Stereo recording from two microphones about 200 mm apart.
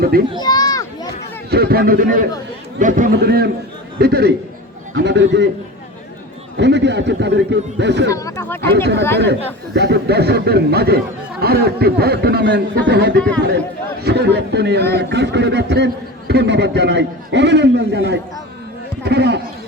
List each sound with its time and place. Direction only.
0.4 s a sound: 20° left (ahead or behind)
1.5 s speech: 50° right (ahead or behind)
6.6 s speech: 60° right (ahead or behind)
8.1 s speech: 15° left (ahead or behind)
8.6 s speech: 55° right (ahead or behind)